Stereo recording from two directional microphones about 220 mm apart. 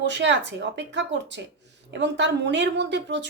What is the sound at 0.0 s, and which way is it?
A woman's voice, 55° right (ahead or behind).